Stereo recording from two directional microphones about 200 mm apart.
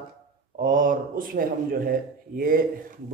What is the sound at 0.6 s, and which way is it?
A man's voice, 40° right (ahead or behind).